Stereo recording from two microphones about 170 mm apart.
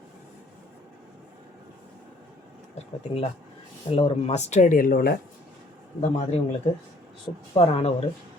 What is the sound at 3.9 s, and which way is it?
Speech, 35° left (ahead or behind).